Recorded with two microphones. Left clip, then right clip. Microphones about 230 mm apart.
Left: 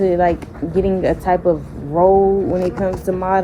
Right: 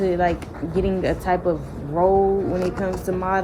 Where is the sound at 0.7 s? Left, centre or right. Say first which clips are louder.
Left 6 dB; left.